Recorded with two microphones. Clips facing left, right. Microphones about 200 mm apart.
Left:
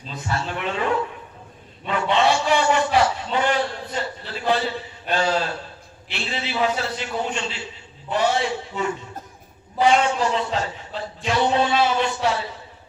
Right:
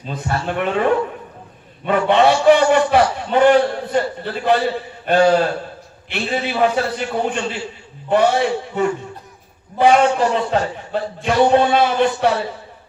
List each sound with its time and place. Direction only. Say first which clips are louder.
0.0 s a man's voice: right 5 dB; 55° right (ahead or behind)
1.9 s a sound: right 6 dB; 55° right (ahead or behind)
5.0 s a man's voice: right 9 dB; 55° right (ahead or behind)